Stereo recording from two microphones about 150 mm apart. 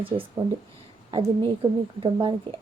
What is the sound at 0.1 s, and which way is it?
A woman's voice, 35° right (ahead or behind).